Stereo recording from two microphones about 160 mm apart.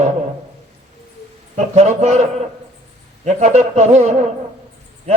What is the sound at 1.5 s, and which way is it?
A man's voice, 40° right (ahead or behind).